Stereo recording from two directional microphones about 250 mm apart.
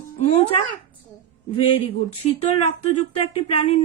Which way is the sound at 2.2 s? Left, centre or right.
Left.